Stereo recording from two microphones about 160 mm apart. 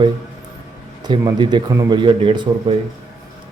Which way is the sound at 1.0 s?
25° right (ahead or behind).